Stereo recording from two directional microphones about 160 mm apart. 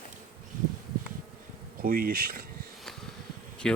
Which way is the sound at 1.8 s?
60° right (ahead or behind).